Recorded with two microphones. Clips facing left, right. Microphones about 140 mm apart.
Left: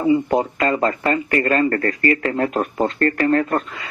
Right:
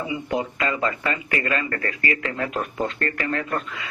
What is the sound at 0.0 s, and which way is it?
Speech, 40° left (ahead or behind).